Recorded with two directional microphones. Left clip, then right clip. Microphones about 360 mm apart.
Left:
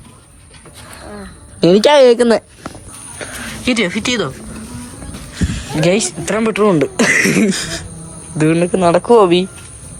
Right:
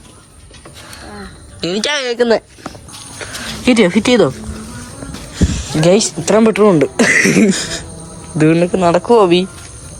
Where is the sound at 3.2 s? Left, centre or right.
Centre.